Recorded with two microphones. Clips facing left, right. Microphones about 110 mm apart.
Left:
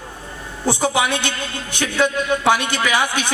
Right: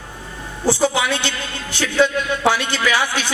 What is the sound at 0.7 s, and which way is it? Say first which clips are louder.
Speech: right 1 dB; 15° left (ahead or behind).